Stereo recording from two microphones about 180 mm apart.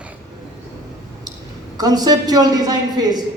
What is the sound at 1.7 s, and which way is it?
A woman's voice, 20° right (ahead or behind).